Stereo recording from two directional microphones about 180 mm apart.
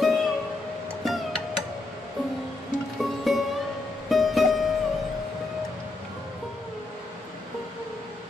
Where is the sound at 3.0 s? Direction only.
Centre (ahead or behind).